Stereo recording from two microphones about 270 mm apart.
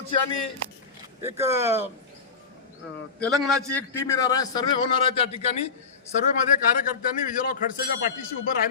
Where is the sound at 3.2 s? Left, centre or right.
Centre; by 5.7 s left.